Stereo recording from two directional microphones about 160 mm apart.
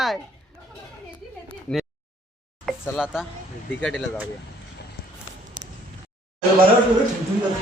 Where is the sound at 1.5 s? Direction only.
Centre (ahead or behind).